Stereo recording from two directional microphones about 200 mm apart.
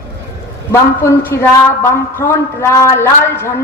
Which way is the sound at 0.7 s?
15° left (ahead or behind).